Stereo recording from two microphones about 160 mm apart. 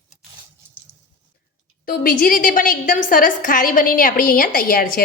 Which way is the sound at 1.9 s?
65° left (ahead or behind).